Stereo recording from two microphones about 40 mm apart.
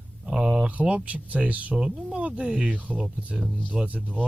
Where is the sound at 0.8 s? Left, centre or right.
Right.